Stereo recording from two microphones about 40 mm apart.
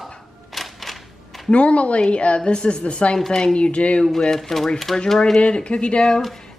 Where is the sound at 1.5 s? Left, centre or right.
Left.